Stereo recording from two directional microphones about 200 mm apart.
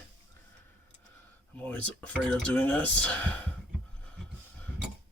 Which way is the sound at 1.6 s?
10° left (ahead or behind).